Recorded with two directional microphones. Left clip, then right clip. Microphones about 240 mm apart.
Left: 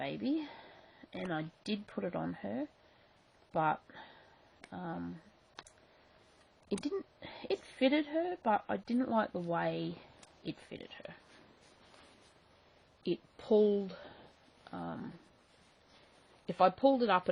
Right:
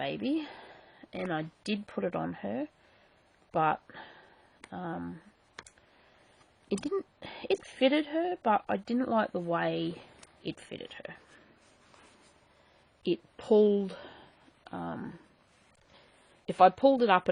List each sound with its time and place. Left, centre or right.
0.0 s a woman's voice: right
6.8 s a woman's voice: right
13.0 s speech: right
16.5 s a woman's voice: right